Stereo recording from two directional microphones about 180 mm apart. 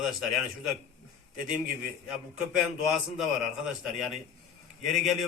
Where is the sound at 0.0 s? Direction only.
Centre (ahead or behind).